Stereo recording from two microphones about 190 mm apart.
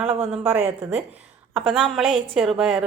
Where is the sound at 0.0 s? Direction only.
30° right (ahead or behind).